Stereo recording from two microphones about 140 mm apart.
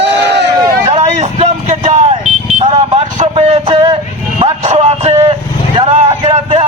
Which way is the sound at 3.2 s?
50° right (ahead or behind).